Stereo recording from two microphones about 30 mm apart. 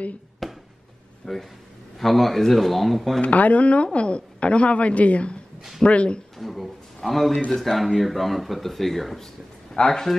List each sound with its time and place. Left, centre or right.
0.4 s a sound: centre
1.2 s a man's voice: centre
3.2 s a woman's voice: left
6.3 s a man's voice: centre
9.8 s a man's voice: centre